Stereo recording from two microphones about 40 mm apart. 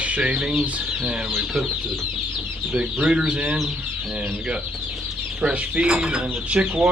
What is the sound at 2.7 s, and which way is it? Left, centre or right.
Speech, right.